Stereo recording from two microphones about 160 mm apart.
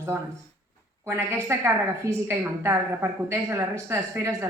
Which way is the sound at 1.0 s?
15° right (ahead or behind).